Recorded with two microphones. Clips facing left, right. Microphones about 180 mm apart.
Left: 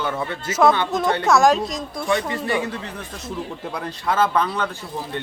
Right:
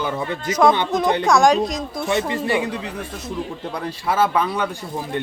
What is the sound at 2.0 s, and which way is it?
Speech, 25° right (ahead or behind).